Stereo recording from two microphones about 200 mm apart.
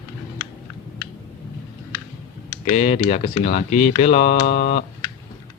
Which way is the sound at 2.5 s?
30° left (ahead or behind).